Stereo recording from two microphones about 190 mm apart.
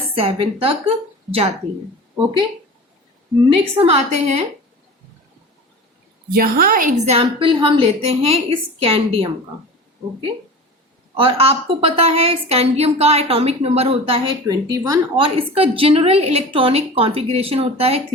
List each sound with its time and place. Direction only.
0.1 s speech: 30° right (ahead or behind)
3.5 s a woman's voice: 30° right (ahead or behind)
6.3 s a woman's voice: 50° right (ahead or behind); by 9.3 s 30° right (ahead or behind)
11.2 s a woman's voice: 30° right (ahead or behind)